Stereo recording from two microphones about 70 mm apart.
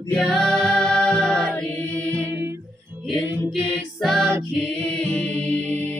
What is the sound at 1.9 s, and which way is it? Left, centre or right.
Music, centre.